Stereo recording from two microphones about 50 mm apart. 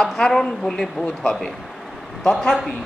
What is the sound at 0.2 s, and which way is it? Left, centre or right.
A woman's voice, centre.